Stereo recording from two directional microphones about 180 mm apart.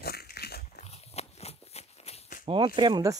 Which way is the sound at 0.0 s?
60° left (ahead or behind).